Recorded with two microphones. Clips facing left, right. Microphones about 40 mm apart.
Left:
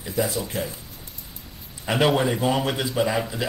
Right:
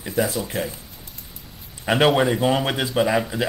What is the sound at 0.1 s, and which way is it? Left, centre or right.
Speech, right.